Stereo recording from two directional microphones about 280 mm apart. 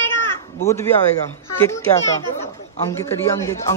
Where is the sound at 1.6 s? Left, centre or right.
Centre.